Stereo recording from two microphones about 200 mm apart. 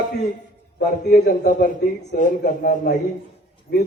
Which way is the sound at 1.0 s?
50° left (ahead or behind).